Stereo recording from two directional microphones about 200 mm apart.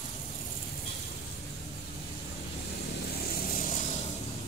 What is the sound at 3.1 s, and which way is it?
Vehicle, 50° left (ahead or behind).